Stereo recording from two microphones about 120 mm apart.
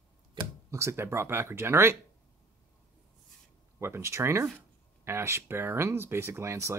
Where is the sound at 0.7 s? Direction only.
25° right (ahead or behind).